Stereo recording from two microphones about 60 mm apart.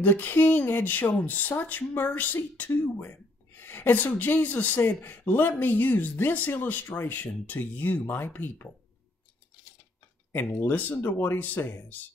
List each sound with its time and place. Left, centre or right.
0.0 s speech: left
10.3 s speech: left